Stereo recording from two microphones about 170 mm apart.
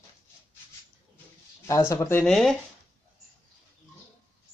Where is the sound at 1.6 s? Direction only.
15° left (ahead or behind).